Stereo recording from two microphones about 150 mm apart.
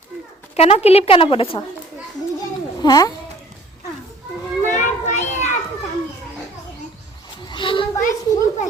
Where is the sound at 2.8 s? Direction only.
25° left (ahead or behind).